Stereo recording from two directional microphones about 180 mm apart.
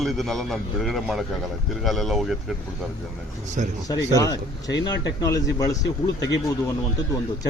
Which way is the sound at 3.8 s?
20° left (ahead or behind).